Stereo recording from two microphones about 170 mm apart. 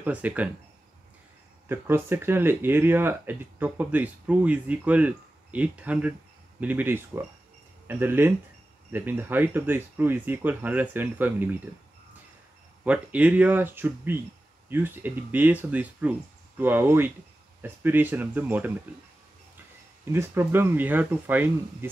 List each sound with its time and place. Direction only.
0.0 s speech: 10° right (ahead or behind)
1.7 s speech: 15° right (ahead or behind)
12.8 s speech: 5° right (ahead or behind)
20.1 s speech: 15° right (ahead or behind)